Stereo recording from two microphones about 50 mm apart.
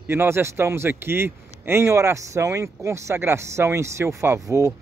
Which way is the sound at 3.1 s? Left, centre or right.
Right.